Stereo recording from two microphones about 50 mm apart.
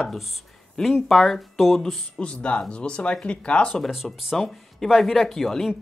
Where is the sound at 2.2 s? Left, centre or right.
Left.